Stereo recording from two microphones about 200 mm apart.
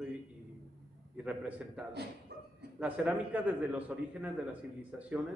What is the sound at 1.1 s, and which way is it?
Speech, 5° right (ahead or behind).